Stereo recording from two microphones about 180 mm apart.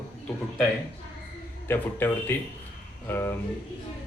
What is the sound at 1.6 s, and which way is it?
A man's voice, 10° left (ahead or behind).